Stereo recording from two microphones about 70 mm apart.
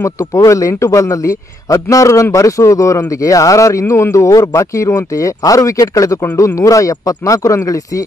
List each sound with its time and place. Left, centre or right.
0.0 s speech: left